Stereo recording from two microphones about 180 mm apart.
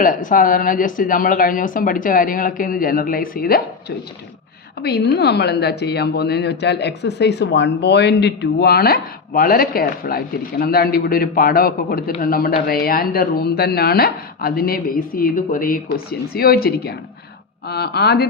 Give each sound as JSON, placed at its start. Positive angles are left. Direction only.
{"t": 0.0, "sound": "speech", "side_deg": 50}